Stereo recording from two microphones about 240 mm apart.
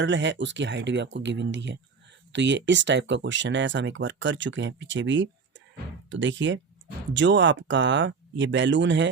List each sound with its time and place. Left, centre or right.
0.0 s speech: right